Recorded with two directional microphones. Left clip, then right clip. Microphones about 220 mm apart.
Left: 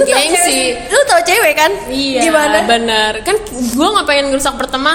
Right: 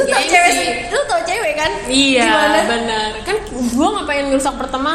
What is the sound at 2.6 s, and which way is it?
A woman's voice, 40° left (ahead or behind).